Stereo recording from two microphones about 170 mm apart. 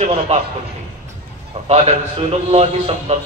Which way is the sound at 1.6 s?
35° right (ahead or behind).